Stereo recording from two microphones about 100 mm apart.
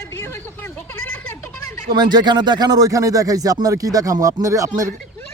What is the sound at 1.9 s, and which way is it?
Speech, 45° right (ahead or behind).